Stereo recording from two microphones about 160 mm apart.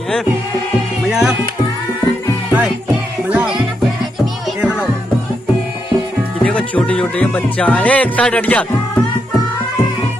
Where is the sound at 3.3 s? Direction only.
5° right (ahead or behind).